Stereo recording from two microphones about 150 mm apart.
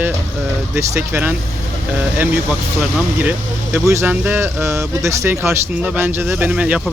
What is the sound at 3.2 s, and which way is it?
Speech, 15° right (ahead or behind).